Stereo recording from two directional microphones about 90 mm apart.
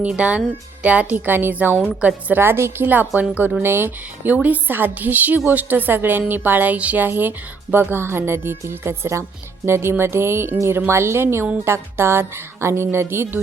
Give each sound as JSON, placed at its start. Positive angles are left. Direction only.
{"t": 0.0, "sound": "a woman's voice", "side_deg": -10}